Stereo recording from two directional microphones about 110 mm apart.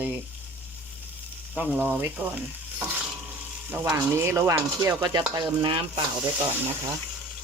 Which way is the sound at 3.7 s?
25° right (ahead or behind).